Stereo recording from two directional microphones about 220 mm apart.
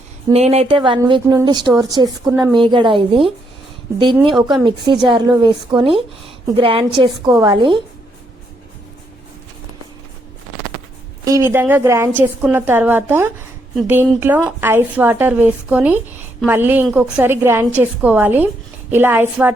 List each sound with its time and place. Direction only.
0.3 s a woman's voice: 30° right (ahead or behind)
11.3 s a woman's voice: 15° right (ahead or behind)